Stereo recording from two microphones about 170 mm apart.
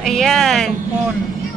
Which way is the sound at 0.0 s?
Centre (ahead or behind).